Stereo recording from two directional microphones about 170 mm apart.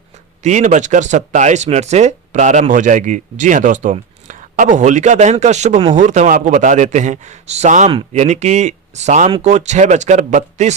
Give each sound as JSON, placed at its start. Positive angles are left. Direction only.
{"t": 0.4, "sound": "speech", "side_deg": -45}